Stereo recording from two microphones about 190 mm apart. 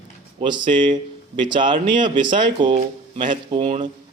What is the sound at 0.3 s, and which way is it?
A man's voice, 25° right (ahead or behind).